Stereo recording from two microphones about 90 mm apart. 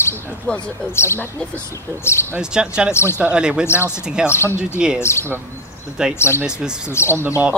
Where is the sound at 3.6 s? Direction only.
30° left (ahead or behind).